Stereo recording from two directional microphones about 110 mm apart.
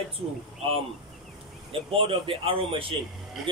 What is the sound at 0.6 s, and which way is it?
Speech, 60° right (ahead or behind).